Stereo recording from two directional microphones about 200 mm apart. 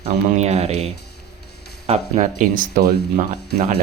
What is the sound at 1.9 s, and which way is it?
Speech, 35° right (ahead or behind).